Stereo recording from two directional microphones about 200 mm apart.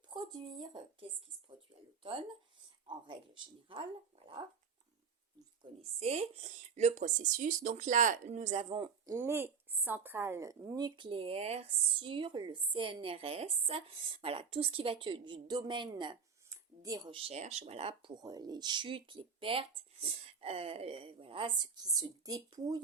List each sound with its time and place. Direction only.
0.1 s a woman's voice: 20° right (ahead or behind)
5.8 s speech: 30° right (ahead or behind)
9.1 s a woman's voice: 10° right (ahead or behind)